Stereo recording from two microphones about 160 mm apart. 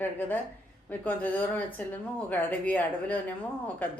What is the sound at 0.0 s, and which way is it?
Speech, 10° left (ahead or behind).